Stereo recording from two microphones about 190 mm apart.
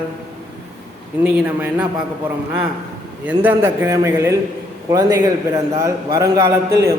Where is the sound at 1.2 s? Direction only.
10° right (ahead or behind).